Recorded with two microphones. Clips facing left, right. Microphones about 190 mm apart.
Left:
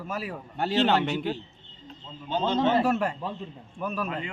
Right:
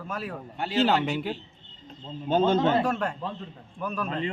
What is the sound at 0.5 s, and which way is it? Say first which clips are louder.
Speech: left 2 dB; 40° left (ahead or behind).